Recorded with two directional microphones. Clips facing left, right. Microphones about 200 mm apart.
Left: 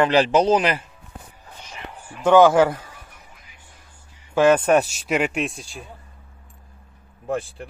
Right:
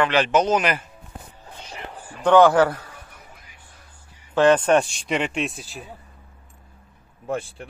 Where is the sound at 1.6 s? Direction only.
35° right (ahead or behind).